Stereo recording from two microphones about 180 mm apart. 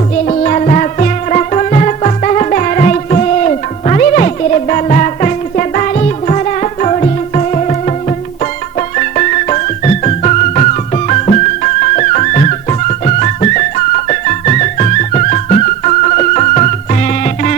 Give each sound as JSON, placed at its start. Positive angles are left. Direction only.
{"t": 0.3, "sound": "music", "side_deg": 40}
{"t": 9.0, "sound": "music", "side_deg": 40}